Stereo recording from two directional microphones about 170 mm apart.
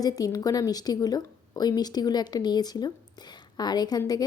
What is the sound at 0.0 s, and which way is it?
A woman's voice, 20° left (ahead or behind).